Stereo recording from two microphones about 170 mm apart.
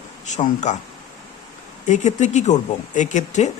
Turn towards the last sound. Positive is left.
turn(degrees=45)  # may be behind; listen again after turning